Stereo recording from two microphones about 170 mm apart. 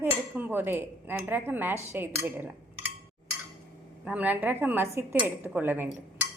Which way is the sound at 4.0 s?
10° right (ahead or behind).